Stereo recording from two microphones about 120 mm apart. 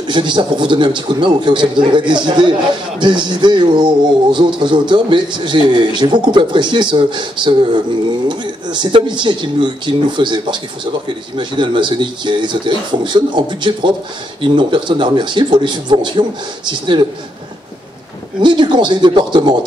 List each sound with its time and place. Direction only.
0.0 s speech: 40° right (ahead or behind)
18.4 s speech: 40° right (ahead or behind)